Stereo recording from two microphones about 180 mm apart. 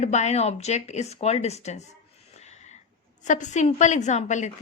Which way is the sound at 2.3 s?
40° left (ahead or behind).